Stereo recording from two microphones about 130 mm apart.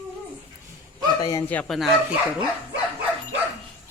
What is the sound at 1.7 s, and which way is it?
Speech, centre (ahead or behind).